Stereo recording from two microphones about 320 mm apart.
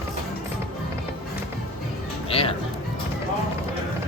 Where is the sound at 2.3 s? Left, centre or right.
Centre.